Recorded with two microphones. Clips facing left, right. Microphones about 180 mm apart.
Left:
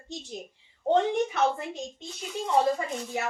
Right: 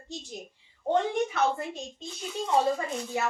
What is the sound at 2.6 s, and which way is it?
Speech, 15° left (ahead or behind).